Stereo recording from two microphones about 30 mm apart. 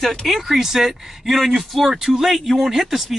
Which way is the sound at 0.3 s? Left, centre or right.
Centre.